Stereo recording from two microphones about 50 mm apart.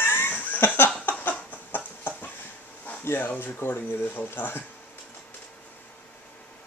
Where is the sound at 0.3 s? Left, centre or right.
Left.